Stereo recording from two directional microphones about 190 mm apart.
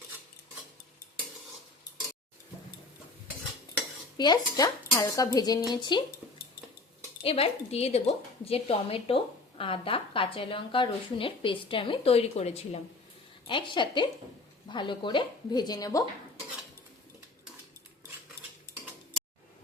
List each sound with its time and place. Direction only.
4.2 s a woman's voice: 20° left (ahead or behind)
7.2 s a woman's voice: 30° left (ahead or behind)
18.4 s cutlery: 55° left (ahead or behind)